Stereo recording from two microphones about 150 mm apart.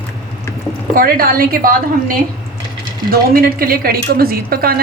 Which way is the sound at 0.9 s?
75° right (ahead or behind).